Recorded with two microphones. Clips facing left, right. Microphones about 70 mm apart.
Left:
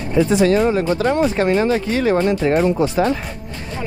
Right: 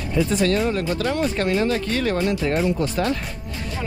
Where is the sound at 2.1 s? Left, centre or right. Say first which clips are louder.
Left 5 dB; left.